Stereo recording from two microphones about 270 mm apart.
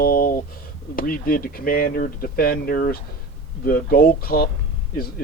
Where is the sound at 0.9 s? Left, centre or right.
Left.